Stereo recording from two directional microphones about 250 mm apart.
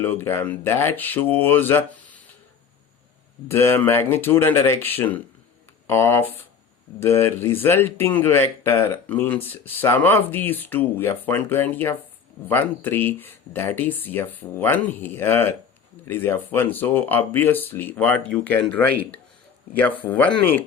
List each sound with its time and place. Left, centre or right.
0.0 s speech: centre
3.5 s speech: centre